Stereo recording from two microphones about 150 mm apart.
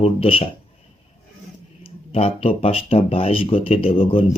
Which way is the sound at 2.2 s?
40° left (ahead or behind).